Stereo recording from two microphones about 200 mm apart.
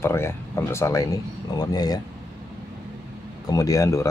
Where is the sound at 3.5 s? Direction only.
15° left (ahead or behind).